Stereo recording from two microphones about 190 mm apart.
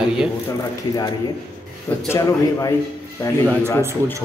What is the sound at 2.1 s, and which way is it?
Speech, 15° left (ahead or behind).